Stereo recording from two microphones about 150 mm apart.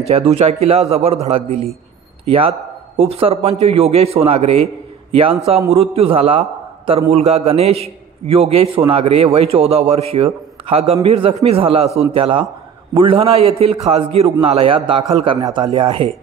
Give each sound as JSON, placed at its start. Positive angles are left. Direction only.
{"t": 0.0, "sound": "a man's voice", "side_deg": -40}
{"t": 15.2, "sound": "a man's voice", "side_deg": -30}
{"t": 15.7, "sound": "a man's voice", "side_deg": -40}